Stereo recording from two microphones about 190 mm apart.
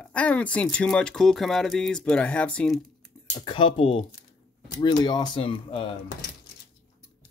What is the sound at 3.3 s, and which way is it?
Speech, 25° left (ahead or behind).